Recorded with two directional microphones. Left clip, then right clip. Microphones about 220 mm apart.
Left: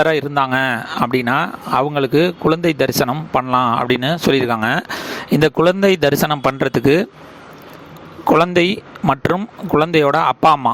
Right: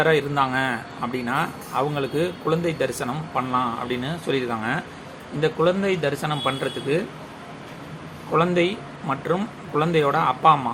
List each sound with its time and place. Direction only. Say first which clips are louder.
0.0 s speech: left 4 dB; 45° left (ahead or behind)
8.5 s speech: left 6 dB; 50° left (ahead or behind)